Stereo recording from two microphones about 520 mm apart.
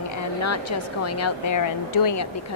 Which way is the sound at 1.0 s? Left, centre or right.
Left.